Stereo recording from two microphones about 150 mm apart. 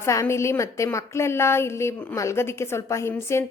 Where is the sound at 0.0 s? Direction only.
20° left (ahead or behind).